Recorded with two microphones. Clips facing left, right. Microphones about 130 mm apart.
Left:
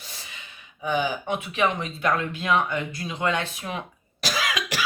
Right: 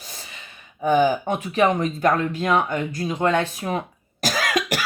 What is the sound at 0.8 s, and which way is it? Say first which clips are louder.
Speech: right 7 dB; 45° right (ahead or behind).